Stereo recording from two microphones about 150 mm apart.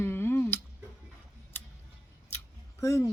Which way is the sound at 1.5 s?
15° left (ahead or behind).